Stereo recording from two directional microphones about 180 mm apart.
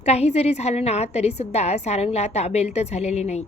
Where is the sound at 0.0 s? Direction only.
35° left (ahead or behind).